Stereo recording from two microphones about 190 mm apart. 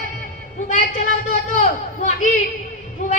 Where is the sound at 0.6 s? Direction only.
40° left (ahead or behind).